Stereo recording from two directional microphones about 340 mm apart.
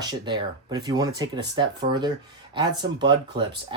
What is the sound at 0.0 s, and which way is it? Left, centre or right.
Speech, centre.